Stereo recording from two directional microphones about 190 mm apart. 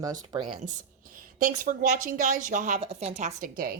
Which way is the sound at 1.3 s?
45° right (ahead or behind).